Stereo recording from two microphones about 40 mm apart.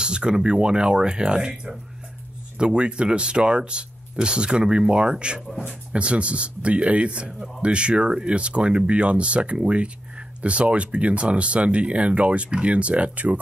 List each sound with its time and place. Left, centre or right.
0.0 s speech: right